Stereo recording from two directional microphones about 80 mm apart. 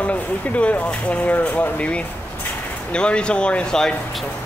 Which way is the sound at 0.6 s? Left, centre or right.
Centre.